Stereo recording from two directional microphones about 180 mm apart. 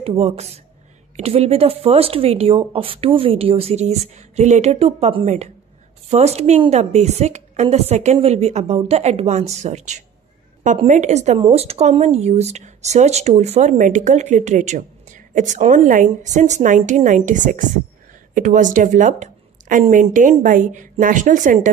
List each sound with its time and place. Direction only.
0.0 s a woman's voice: 35° right (ahead or behind)